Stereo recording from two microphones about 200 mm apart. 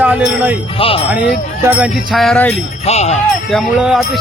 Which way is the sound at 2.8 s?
30° left (ahead or behind).